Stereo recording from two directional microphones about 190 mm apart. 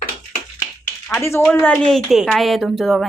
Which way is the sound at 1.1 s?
15° left (ahead or behind).